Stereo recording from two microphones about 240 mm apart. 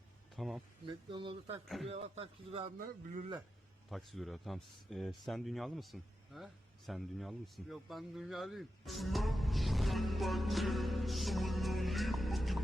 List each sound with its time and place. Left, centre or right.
0.3 s speech: centre
0.9 s a man's voice: right
1.6 s speech: centre
1.9 s a man's voice: right
3.8 s a man's voice: centre